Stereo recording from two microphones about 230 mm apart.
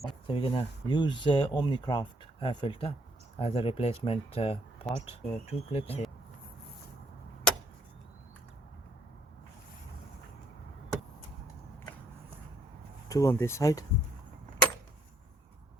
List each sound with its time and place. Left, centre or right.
0.3 s speech: left
13.1 s speech: centre